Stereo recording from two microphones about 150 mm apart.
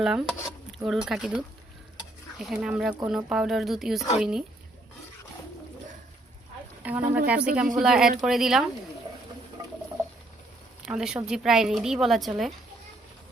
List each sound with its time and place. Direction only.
0.0 s a woman's voice: 5° right (ahead or behind)
0.3 s speech: 20° left (ahead or behind)
0.8 s a woman's voice: 5° right (ahead or behind)
6.8 s a woman's voice: 10° right (ahead or behind)
10.8 s a woman's voice: 5° right (ahead or behind)